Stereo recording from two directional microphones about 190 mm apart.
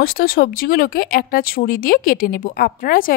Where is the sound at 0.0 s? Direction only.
50° left (ahead or behind).